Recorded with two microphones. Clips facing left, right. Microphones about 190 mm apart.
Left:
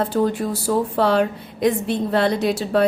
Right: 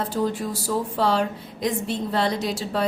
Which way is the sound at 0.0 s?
60° left (ahead or behind).